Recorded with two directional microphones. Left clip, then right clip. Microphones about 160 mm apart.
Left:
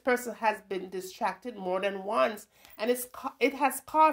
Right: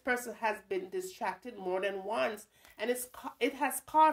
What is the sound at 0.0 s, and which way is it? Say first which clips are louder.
Speech: left 5 dB; 35° left (ahead or behind).